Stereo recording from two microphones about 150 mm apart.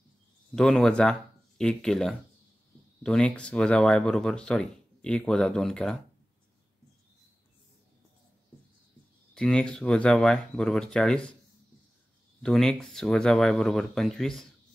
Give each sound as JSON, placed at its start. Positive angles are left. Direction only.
{"t": 0.6, "sound": "speech", "side_deg": 5}
{"t": 9.3, "sound": "speech", "side_deg": 5}
{"t": 12.4, "sound": "speech", "side_deg": 5}